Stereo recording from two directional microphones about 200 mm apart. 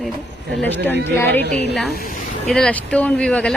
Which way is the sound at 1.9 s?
45° left (ahead or behind).